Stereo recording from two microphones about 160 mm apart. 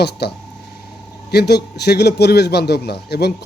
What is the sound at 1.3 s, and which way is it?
Speech, 90° left.